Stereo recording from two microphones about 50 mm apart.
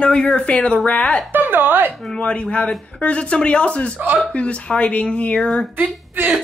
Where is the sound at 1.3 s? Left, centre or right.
Right.